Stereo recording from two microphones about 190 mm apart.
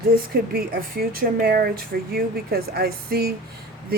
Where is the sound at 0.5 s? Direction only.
50° right (ahead or behind).